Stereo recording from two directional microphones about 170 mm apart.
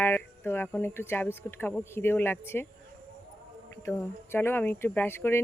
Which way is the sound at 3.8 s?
15° left (ahead or behind).